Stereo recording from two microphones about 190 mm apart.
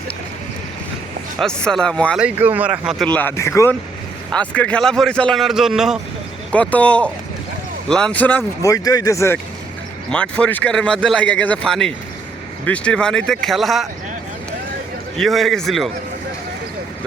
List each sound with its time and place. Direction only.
1.4 s speech: 5° left (ahead or behind)
2.2 s speech: 10° right (ahead or behind)
3.1 s speech: 10° left (ahead or behind)
15.2 s speech: centre (ahead or behind)